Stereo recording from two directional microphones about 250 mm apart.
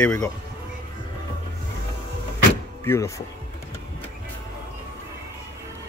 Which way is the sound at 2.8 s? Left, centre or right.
Centre.